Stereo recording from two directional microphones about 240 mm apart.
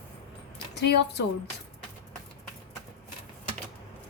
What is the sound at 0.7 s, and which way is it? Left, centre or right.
Speech, left.